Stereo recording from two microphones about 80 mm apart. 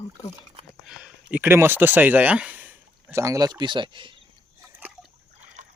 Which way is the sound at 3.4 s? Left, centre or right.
Right.